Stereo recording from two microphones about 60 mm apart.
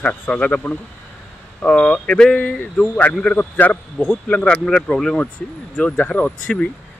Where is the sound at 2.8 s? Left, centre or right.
Left.